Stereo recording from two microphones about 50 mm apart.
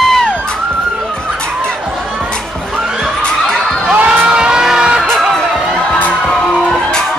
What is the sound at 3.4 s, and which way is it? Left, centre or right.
Crowd, centre.